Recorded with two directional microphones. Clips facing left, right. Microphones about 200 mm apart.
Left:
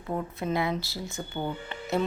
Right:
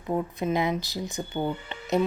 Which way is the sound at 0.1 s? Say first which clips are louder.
Right 3 dB; 15° right (ahead or behind).